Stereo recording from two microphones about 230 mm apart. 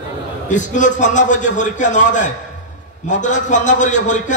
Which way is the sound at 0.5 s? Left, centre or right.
Left.